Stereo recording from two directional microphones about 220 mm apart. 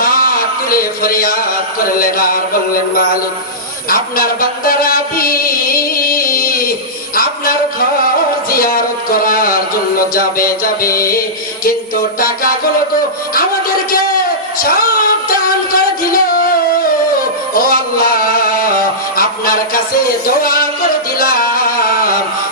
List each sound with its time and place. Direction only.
0.0 s a sound: 40° left (ahead or behind)
2.0 s music: 40° left (ahead or behind)
3.8 s music: 40° left (ahead or behind)
8.4 s a sound: 40° left (ahead or behind)
10.2 s music: 40° left (ahead or behind)
14.6 s music: 40° left (ahead or behind)
17.5 s music: 40° left (ahead or behind)